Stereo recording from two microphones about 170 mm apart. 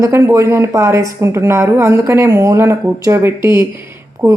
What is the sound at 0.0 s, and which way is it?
Speech, 15° right (ahead or behind).